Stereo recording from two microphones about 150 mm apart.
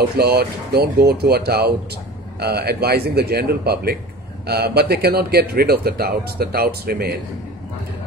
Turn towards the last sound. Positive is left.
turn(degrees=-90)